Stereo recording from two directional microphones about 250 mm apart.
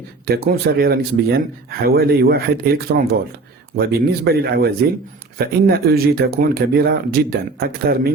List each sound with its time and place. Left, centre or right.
0.3 s speech: right